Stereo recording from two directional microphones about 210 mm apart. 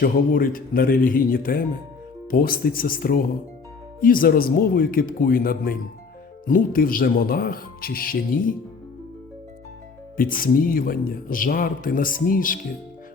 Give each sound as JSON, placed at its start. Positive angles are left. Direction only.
{"t": 0.0, "sound": "speech", "side_deg": 40}
{"t": 10.2, "sound": "speech", "side_deg": 40}